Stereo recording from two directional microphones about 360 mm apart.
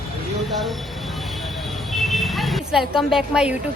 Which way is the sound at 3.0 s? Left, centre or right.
Centre.